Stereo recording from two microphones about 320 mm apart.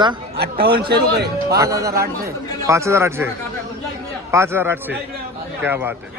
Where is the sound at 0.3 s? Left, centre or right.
Right.